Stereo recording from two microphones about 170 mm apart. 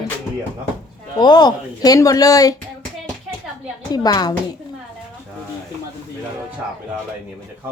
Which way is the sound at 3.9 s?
25° left (ahead or behind).